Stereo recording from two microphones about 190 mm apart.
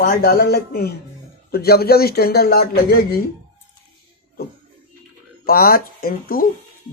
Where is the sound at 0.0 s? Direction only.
50° left (ahead or behind).